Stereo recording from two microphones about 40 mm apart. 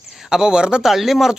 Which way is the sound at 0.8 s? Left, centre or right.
Centre.